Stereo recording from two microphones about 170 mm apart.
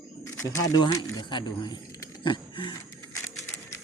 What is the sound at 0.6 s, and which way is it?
Speech, 25° left (ahead or behind).